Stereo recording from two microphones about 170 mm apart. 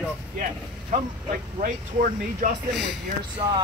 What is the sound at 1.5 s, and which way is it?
Speech, 50° right (ahead or behind).